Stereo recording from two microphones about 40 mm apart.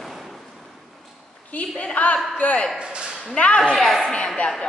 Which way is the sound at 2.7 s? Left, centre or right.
Right.